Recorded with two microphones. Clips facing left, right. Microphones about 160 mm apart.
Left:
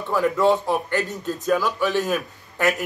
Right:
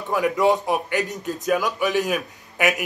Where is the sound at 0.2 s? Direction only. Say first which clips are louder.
Even; 15° right (ahead or behind).